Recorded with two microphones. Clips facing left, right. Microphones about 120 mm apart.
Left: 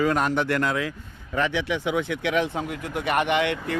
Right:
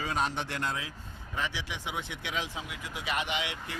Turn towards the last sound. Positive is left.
turn(degrees=60)  # may be behind; listen again after turning